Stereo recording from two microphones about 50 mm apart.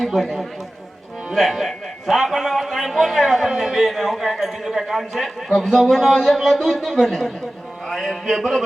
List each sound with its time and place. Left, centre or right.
0.0 s a man's voice: centre